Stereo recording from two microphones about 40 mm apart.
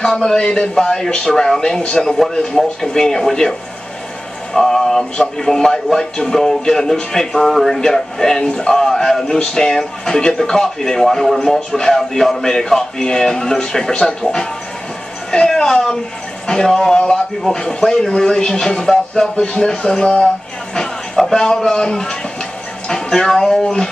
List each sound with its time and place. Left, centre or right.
0.0 s speech: centre
1.7 s speech: left
2.0 s speech: centre
4.6 s speech: centre
5.1 s speech: left
5.5 s a man's voice: centre
15.3 s speech: centre
19.3 s speech: left
19.6 s speech: centre